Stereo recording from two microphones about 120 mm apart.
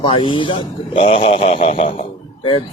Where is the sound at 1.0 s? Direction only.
60° left (ahead or behind).